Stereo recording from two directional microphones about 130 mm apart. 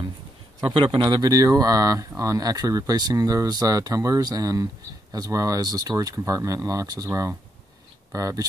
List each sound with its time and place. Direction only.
0.7 s speech: 40° right (ahead or behind)